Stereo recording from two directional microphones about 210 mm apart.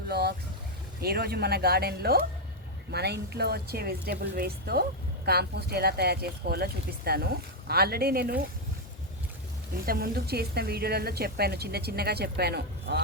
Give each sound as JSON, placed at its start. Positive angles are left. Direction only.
{"t": 0.1, "sound": "speech", "side_deg": -50}
{"t": 9.8, "sound": "speech", "side_deg": -45}